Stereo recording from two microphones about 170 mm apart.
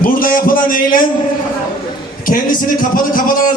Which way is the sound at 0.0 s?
55° left (ahead or behind).